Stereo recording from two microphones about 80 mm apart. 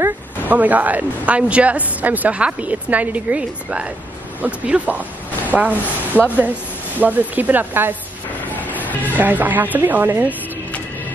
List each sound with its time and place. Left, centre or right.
0.5 s speech: right
9.1 s speech: right